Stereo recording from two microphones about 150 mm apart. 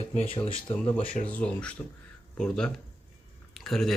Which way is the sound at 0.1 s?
40° left (ahead or behind).